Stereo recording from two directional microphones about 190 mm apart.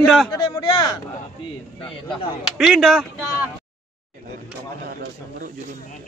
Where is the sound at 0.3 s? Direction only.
20° left (ahead or behind).